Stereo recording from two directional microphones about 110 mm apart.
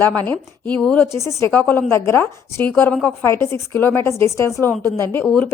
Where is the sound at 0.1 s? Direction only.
15° left (ahead or behind).